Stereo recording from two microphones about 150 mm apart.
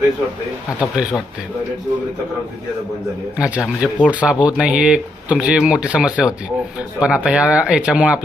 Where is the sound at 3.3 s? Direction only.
10° right (ahead or behind).